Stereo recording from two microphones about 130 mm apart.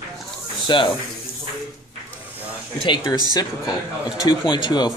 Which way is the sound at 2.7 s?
40° left (ahead or behind).